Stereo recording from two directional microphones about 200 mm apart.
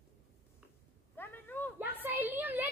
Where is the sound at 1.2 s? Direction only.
10° left (ahead or behind).